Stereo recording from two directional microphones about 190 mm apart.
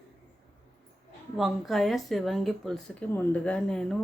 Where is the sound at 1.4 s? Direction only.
Centre (ahead or behind).